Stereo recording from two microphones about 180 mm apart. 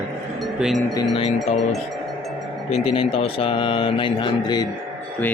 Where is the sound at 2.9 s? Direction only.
30° left (ahead or behind).